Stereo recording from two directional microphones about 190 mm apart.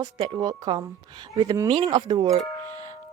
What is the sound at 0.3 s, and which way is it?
Speech, 20° right (ahead or behind).